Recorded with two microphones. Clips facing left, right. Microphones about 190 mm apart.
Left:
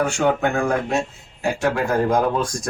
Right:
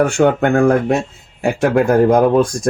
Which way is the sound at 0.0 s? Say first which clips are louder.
Right 6 dB; 60° right (ahead or behind).